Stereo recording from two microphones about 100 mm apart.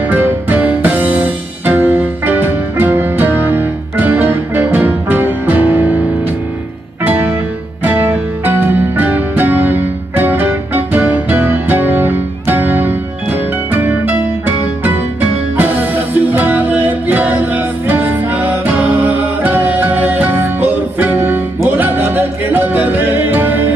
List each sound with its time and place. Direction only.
0.1 s music: 15° right (ahead or behind)
7.8 s music: 20° right (ahead or behind)
16.2 s music: 20° right (ahead or behind)